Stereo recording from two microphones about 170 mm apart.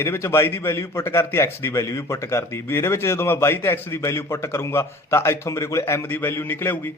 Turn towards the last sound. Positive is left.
turn(degrees=10)  # may be behind; listen again after turning